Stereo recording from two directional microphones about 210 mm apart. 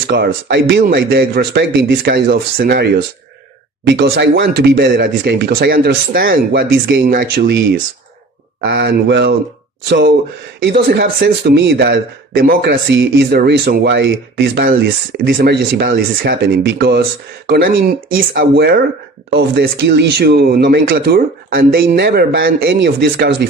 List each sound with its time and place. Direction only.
0.1 s speech: 50° right (ahead or behind)
8.6 s speech: 60° right (ahead or behind)